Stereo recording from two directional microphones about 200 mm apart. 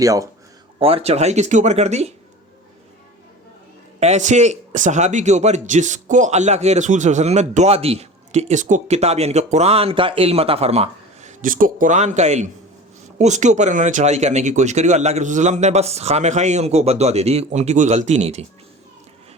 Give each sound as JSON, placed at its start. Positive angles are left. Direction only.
{"t": 0.0, "sound": "speech", "side_deg": -15}
{"t": 0.8, "sound": "speech", "side_deg": -30}
{"t": 4.0, "sound": "speech", "side_deg": -35}